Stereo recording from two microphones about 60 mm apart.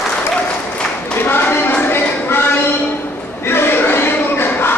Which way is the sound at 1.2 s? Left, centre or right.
Left.